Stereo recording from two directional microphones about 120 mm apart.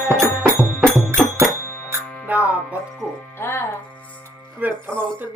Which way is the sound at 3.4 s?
20° left (ahead or behind).